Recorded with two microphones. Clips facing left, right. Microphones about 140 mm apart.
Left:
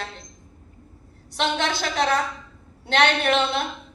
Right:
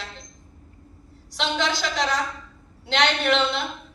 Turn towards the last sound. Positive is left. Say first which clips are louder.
# left 2 dB
turn(degrees=55)  # may be behind; listen again after turning